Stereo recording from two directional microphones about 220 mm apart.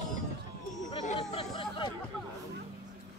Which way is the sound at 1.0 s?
25° left (ahead or behind).